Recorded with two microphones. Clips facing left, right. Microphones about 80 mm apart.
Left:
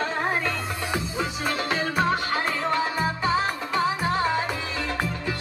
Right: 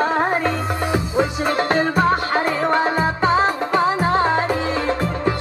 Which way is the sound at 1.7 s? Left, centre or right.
Right.